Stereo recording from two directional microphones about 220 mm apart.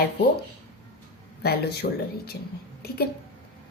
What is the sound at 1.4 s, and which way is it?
Speech, 45° left (ahead or behind).